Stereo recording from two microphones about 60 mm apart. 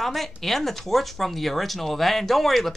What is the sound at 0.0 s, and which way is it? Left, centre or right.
Speech, centre.